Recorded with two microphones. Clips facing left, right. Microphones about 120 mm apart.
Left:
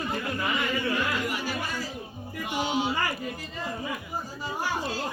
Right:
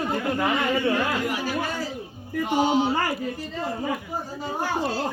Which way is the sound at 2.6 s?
50° right (ahead or behind).